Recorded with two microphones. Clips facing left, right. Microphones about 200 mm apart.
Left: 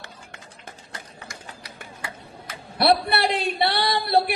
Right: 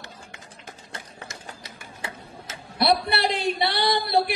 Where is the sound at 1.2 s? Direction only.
25° right (ahead or behind).